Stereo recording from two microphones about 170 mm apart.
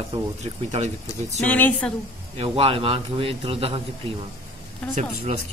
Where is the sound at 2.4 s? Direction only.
35° right (ahead or behind).